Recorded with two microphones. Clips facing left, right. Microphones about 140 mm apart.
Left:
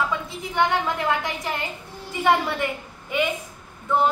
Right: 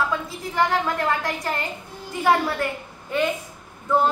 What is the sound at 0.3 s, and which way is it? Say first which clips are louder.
A woman's voice: left 1 dB; centre (ahead or behind).